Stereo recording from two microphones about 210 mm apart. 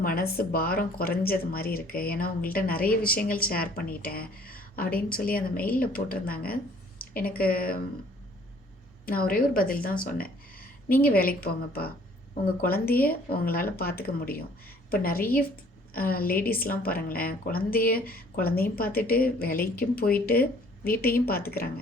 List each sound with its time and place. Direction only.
0.0 s speech: 45° left (ahead or behind)
9.0 s speech: 45° left (ahead or behind)